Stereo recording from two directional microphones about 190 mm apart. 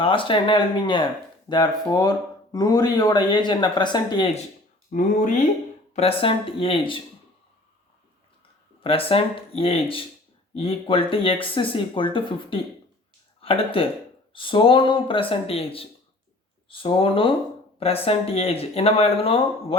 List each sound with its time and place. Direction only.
0.0 s speech: 25° left (ahead or behind)
4.9 s speech: 40° left (ahead or behind)
5.9 s speech: 30° left (ahead or behind)
8.8 s speech: 30° left (ahead or behind)